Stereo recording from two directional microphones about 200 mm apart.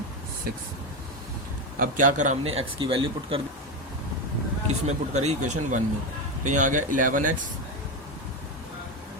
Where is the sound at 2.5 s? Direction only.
25° right (ahead or behind).